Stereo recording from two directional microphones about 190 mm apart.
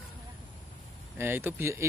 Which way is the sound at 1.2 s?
10° right (ahead or behind).